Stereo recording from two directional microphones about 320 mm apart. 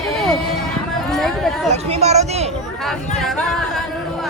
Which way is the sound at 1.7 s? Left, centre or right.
Centre.